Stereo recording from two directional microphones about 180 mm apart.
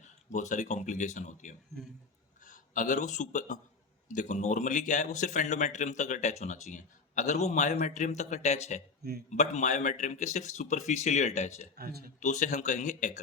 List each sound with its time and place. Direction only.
0.0 s a man's voice: 40° left (ahead or behind)
11.8 s speech: 60° right (ahead or behind)
12.2 s a man's voice: 40° left (ahead or behind)